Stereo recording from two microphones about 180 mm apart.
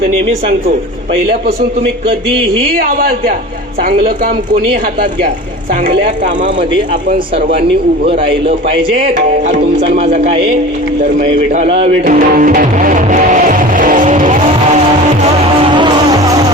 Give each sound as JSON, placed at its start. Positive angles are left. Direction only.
{"t": 3.0, "sound": "a man's voice", "side_deg": -55}
{"t": 8.0, "sound": "music", "side_deg": -30}
{"t": 9.1, "sound": "music", "side_deg": -45}
{"t": 11.5, "sound": "music", "side_deg": -35}
{"t": 12.0, "sound": "music", "side_deg": -50}
{"t": 15.7, "sound": "music", "side_deg": -25}